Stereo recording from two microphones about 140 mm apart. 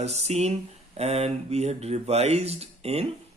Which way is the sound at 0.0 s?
50° right (ahead or behind).